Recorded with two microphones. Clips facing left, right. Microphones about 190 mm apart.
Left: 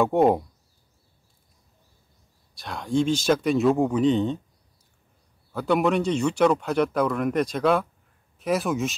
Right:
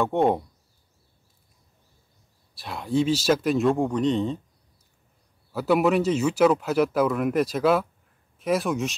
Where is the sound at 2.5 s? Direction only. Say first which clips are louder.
Even; 5° right (ahead or behind).